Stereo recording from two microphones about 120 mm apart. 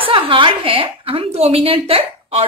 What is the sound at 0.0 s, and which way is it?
A woman's voice, 45° right (ahead or behind).